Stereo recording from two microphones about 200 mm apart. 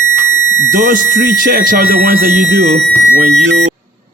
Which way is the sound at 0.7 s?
45° right (ahead or behind).